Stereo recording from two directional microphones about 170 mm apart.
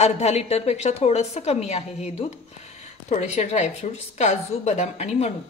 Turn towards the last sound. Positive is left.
turn(degrees=40)  # may be behind; listen again after turning